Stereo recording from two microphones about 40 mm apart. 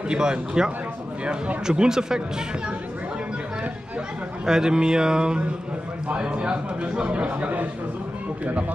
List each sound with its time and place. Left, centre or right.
0.1 s speech: centre
1.7 s speech: centre
4.5 s a man's voice: centre; by 7.6 s right